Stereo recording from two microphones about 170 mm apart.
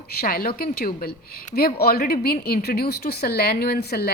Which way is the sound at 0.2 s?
60° left (ahead or behind).